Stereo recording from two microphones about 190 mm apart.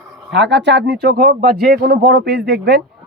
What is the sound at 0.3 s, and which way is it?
Speech, 65° right (ahead or behind).